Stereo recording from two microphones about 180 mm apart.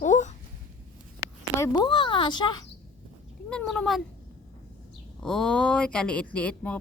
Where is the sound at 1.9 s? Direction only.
25° left (ahead or behind).